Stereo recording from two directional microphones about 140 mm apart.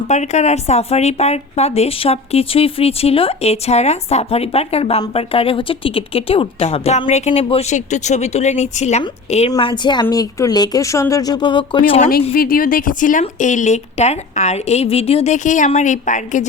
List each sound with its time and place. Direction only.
0.1 s speech: 55° left (ahead or behind)
9.5 s a woman's voice: 35° left (ahead or behind)
12.3 s speech: 90° left; by 16.5 s 60° left (ahead or behind)